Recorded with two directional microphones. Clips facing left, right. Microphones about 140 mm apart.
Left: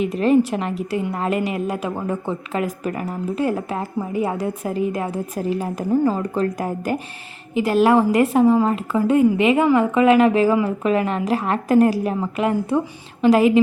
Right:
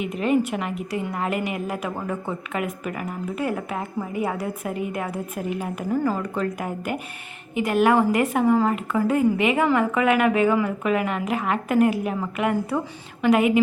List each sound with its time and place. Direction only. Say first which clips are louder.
0.1 s a woman's voice: left 3 dB; 35° left (ahead or behind)
5.9 s a woman's voice: left 5 dB; 20° left (ahead or behind)
6.2 s a woman's voice: left 4 dB; 35° left (ahead or behind)